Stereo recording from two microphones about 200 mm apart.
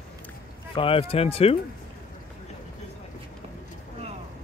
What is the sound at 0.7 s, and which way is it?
Speech, 25° left (ahead or behind).